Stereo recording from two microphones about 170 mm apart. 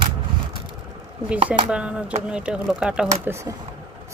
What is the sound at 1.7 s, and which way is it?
Speech, 5° right (ahead or behind).